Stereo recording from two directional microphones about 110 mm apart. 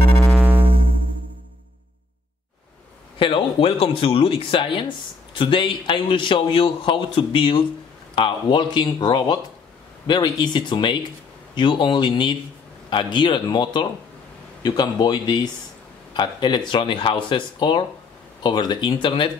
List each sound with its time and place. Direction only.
0.6 s music: 55° right (ahead or behind)
3.2 s a man's voice: 55° left (ahead or behind)